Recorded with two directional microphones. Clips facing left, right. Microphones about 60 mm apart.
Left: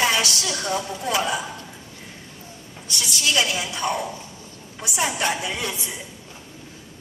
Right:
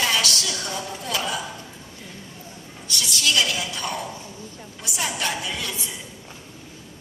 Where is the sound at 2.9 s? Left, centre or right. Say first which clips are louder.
Even; left.